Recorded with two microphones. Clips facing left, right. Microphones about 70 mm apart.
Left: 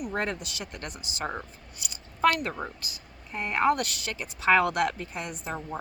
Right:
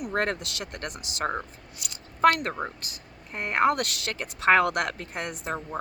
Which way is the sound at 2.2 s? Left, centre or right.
Right.